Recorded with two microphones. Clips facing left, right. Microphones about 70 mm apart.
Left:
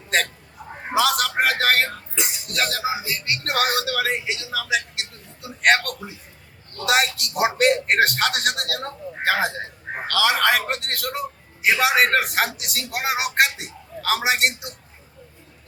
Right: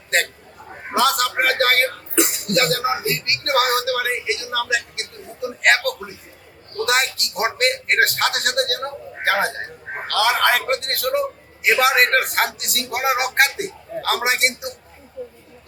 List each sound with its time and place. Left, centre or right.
0.1 s hiccup: centre
0.9 s a sound: centre
2.1 s throat clearing: right
2.5 s speech: centre